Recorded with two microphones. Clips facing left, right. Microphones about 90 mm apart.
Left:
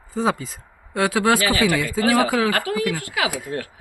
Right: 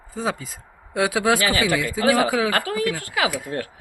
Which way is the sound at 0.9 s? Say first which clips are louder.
Left 1 dB; 10° right (ahead or behind).